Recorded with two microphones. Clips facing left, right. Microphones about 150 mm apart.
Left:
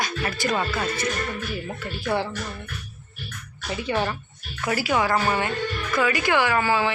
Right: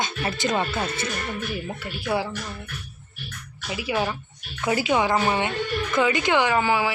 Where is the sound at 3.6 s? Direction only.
5° right (ahead or behind).